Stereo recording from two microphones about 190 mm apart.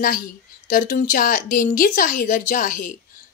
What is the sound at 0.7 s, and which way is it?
A woman's voice, 45° left (ahead or behind).